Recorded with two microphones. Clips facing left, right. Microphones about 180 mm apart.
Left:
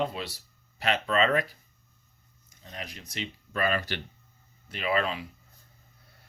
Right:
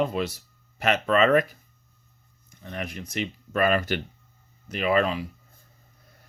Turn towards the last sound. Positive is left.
turn(degrees=-45)  # may be behind; listen again after turning